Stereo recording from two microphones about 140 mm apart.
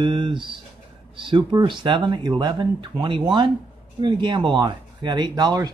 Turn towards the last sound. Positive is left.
turn(degrees=-30)  # may be behind; listen again after turning